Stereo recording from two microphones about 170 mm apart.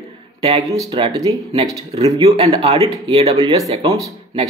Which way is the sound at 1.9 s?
35° right (ahead or behind).